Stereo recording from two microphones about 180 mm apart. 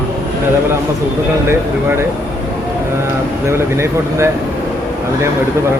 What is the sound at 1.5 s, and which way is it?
Speech, 15° right (ahead or behind).